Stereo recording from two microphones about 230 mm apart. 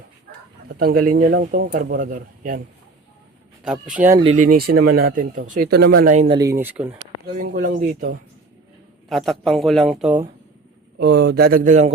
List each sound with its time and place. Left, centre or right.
0.8 s speech: right
3.6 s speech: centre
4.2 s speech: right
6.6 s speech: centre
7.3 s speech: right
9.0 s speech: centre
10.9 s speech: right